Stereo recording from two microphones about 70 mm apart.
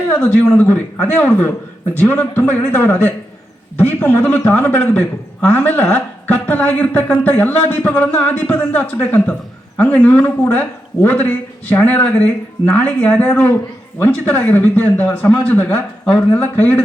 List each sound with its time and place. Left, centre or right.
0.2 s a man's voice: left